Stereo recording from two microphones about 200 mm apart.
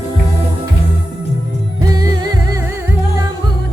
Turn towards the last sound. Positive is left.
turn(degrees=-20)  # may be behind; listen again after turning